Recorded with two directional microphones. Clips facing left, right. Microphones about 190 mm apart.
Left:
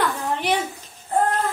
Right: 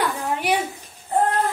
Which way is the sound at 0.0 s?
10° right (ahead or behind).